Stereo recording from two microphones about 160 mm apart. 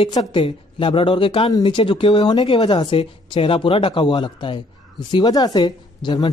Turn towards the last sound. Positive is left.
turn(degrees=25)  # may be behind; listen again after turning